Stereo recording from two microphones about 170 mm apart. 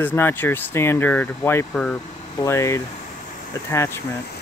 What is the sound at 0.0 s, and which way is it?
Speech, 10° left (ahead or behind).